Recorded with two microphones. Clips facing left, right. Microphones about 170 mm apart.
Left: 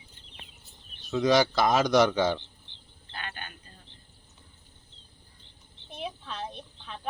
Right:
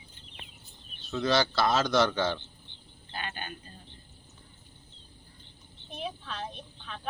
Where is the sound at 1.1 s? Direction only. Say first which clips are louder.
Left 4 dB; 15° left (ahead or behind).